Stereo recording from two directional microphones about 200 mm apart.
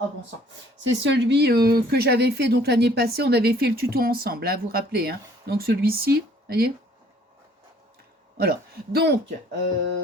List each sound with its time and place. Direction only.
0.9 s speech: 60° right (ahead or behind)
8.4 s speech: 50° right (ahead or behind)